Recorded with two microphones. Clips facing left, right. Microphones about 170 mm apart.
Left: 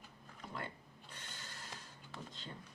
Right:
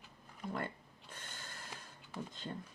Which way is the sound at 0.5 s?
50° right (ahead or behind).